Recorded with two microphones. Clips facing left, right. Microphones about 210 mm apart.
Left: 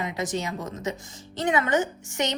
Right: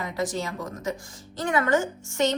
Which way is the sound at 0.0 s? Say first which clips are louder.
Even; 20° left (ahead or behind).